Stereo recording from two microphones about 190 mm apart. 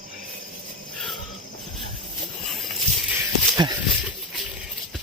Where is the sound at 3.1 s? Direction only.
20° right (ahead or behind).